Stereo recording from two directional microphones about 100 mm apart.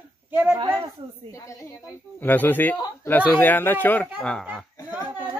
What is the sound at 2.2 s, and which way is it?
Speech, 20° left (ahead or behind).